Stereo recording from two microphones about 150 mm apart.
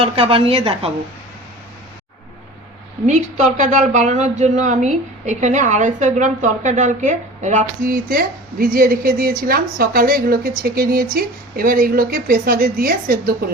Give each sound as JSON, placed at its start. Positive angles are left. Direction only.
{"t": 0.0, "sound": "a woman's voice", "side_deg": -35}
{"t": 3.1, "sound": "speech", "side_deg": -50}